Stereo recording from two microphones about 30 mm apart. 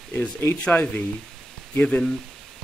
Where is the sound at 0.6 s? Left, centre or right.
Left.